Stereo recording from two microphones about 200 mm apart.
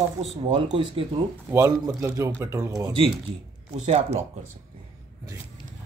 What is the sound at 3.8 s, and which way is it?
Speech, 35° right (ahead or behind).